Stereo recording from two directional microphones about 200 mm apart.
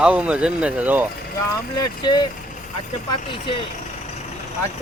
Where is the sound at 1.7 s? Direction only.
20° left (ahead or behind).